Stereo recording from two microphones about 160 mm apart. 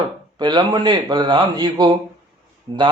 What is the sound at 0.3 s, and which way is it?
A man's voice, 25° right (ahead or behind).